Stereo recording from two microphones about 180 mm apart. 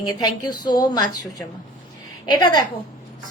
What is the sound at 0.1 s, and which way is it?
A woman's voice, 20° left (ahead or behind).